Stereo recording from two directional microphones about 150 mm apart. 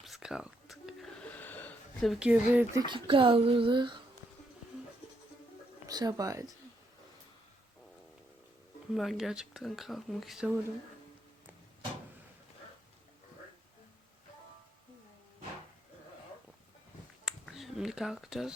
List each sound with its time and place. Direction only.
0.0 s a sound: centre (ahead or behind)
2.0 s speech: 5° right (ahead or behind)
2.7 s speech: 30° right (ahead or behind)
5.8 s speech: 25° right (ahead or behind)
8.9 s speech: centre (ahead or behind)
17.2 s finger snapping: centre (ahead or behind)